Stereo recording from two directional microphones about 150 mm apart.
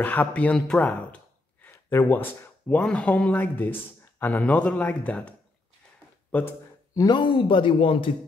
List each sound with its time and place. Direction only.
0.0 s speech: 10° left (ahead or behind)
6.3 s a man's voice: 15° left (ahead or behind); by 8.1 s 35° left (ahead or behind)